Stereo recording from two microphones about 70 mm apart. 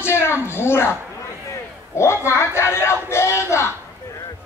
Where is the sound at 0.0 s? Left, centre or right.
Left.